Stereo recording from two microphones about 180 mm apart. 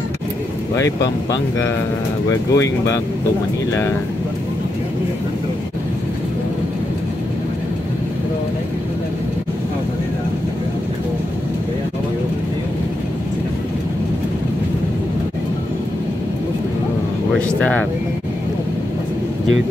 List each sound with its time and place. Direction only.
2.5 s speech: 20° left (ahead or behind)
17.6 s speech: 5° left (ahead or behind)